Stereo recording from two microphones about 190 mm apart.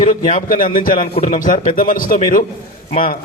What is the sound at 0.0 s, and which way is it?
A man's voice, 40° left (ahead or behind).